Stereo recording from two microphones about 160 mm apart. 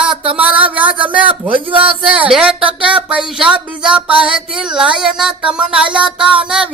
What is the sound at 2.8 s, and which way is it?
Speech, 5° right (ahead or behind).